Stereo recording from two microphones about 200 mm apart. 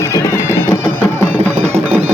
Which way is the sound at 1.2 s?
10° left (ahead or behind).